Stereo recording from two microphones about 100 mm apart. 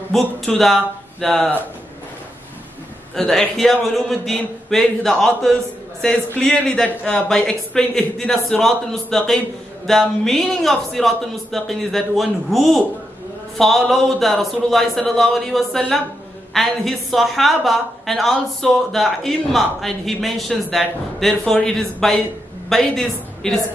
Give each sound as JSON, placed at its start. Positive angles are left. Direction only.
{"t": 0.1, "sound": "speech", "side_deg": 0}
{"t": 3.2, "sound": "a woman's voice", "side_deg": 5}